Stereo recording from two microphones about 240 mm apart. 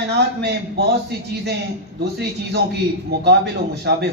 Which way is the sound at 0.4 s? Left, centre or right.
Right.